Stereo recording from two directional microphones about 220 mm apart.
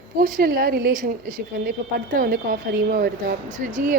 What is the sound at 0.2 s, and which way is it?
Speech, 40° right (ahead or behind).